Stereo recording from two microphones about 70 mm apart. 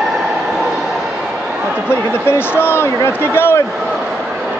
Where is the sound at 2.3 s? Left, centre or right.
Left.